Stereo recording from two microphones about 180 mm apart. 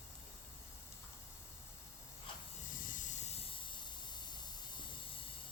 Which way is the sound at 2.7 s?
50° left (ahead or behind).